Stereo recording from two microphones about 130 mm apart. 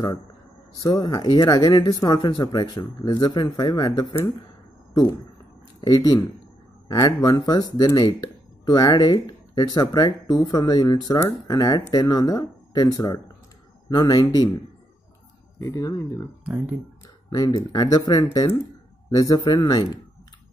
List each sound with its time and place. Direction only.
0.7 s speech: 25° left (ahead or behind)
15.6 s speech: 25° left (ahead or behind)
16.4 s speech: 5° right (ahead or behind)
17.3 s speech: 30° left (ahead or behind)